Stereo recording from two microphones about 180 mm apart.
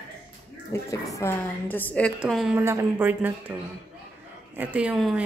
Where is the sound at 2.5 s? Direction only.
15° right (ahead or behind).